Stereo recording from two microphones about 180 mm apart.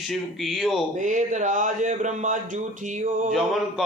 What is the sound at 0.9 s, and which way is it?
Speech, 45° right (ahead or behind).